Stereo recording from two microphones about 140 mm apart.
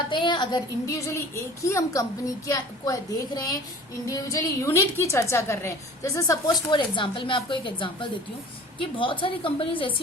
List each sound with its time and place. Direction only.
0.1 s a woman's voice: 35° left (ahead or behind)
6.7 s speech: 35° left (ahead or behind)